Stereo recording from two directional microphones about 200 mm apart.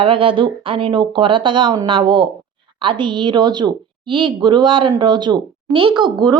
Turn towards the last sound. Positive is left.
turn(degrees=-20)  # may be behind; listen again after turning